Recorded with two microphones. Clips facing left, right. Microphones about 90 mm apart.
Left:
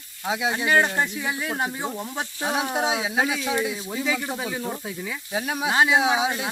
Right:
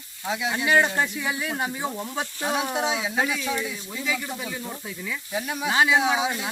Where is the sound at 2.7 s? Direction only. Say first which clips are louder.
Left 1 dB; 35° left (ahead or behind).